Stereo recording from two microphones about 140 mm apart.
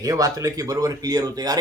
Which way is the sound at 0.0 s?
25° right (ahead or behind).